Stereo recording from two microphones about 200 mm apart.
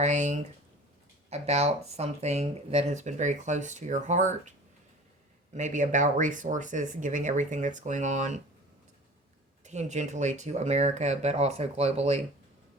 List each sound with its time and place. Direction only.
0.0 s speech: 35° right (ahead or behind)
5.5 s speech: 40° right (ahead or behind)
9.6 s speech: 35° right (ahead or behind)